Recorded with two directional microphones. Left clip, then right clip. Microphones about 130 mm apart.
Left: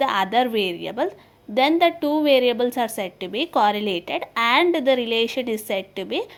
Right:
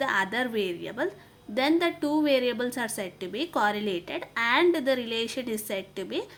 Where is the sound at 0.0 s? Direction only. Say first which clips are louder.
Left 7 dB; 35° left (ahead or behind).